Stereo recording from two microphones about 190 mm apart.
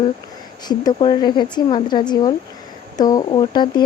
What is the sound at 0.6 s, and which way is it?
Speech, 20° left (ahead or behind).